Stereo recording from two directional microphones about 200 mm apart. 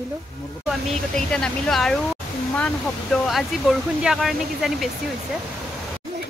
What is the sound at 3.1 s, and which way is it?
Speech, centre (ahead or behind).